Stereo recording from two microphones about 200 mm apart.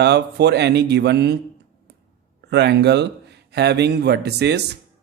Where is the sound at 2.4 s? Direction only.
55° right (ahead or behind).